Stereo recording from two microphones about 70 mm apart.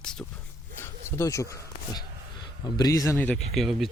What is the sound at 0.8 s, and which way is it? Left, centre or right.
Speech, left.